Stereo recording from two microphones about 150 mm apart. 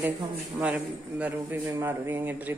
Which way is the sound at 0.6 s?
10° right (ahead or behind).